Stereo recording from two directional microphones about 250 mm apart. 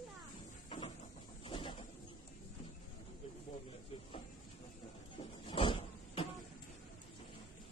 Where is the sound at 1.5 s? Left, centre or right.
Left.